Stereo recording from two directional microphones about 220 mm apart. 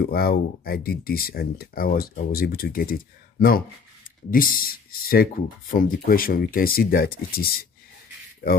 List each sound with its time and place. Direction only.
0.0 s speech: 45° left (ahead or behind)